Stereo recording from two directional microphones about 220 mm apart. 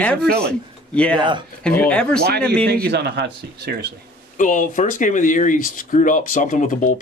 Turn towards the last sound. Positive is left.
turn(degrees=35)  # may be behind; listen again after turning